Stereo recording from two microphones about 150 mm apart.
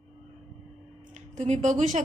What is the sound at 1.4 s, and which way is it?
Speech, 50° right (ahead or behind).